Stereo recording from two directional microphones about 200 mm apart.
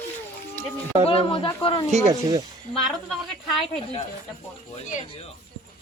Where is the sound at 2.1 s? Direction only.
15° right (ahead or behind).